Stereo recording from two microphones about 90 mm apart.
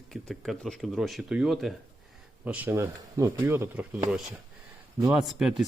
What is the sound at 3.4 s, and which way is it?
Speech, 25° right (ahead or behind).